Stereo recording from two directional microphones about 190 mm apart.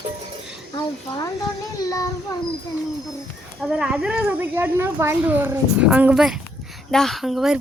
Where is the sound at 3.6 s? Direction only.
5° right (ahead or behind).